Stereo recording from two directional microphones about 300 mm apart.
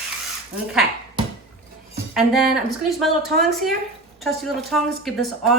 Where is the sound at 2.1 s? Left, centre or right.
Centre.